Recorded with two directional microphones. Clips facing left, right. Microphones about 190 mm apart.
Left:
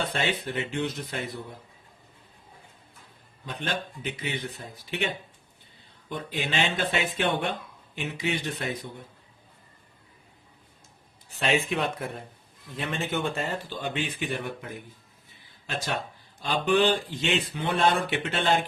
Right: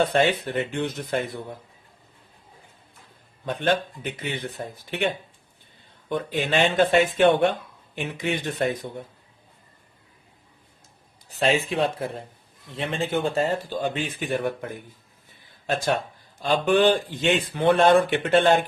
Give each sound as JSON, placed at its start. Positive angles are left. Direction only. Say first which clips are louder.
{"t": 0.0, "sound": "speech", "louder": "right 8 dB", "side_deg": -50}
{"t": 3.4, "sound": "speech", "louder": "right 9 dB", "side_deg": -55}
{"t": 6.1, "sound": "speech", "louder": "right 7 dB", "side_deg": -55}
{"t": 11.3, "sound": "speech", "louder": "right 3 dB", "side_deg": -35}